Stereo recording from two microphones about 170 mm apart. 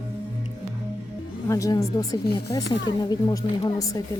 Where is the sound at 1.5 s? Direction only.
20° left (ahead or behind).